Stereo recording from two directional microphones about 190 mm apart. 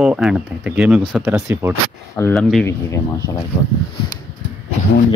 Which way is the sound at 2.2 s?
15° left (ahead or behind).